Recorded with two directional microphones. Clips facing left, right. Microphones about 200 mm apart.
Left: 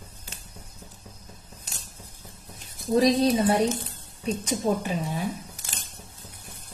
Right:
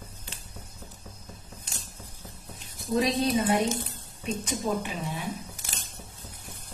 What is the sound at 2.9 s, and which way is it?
Speech, 35° left (ahead or behind).